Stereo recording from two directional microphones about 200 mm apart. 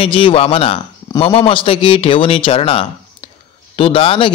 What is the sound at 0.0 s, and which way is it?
Speech, 25° left (ahead or behind).